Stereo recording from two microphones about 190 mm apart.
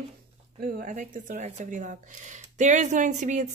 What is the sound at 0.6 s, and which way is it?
Speech, 50° right (ahead or behind).